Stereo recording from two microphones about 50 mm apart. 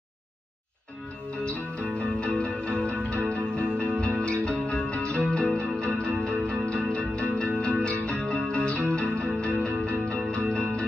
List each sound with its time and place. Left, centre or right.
1.3 s music: left